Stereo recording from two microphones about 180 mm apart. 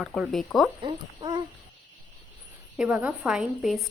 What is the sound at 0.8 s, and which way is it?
Speech, 25° right (ahead or behind).